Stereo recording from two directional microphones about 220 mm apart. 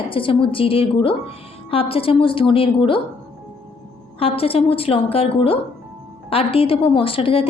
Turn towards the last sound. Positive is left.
turn(degrees=25)  # may be behind; listen again after turning